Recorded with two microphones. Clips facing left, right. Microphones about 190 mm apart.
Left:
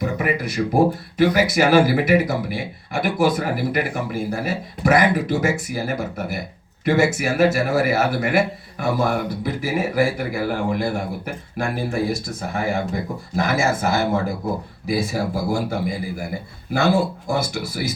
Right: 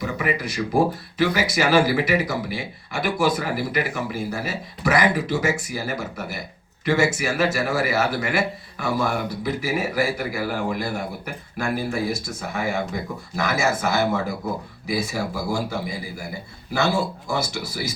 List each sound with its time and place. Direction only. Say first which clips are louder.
0.0 s a man's voice: left 3 dB; 55° left (ahead or behind)